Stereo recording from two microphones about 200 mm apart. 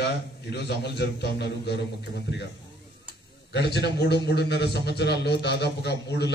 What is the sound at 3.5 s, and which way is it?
A man's voice, 55° left (ahead or behind).